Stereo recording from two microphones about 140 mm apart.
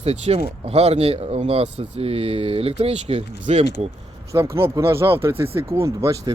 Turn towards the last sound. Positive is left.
turn(degrees=-20)  # may be behind; listen again after turning